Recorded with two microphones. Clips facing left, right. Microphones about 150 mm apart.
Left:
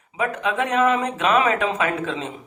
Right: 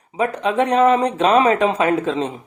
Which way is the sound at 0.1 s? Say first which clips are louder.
Right 4 dB; 35° right (ahead or behind).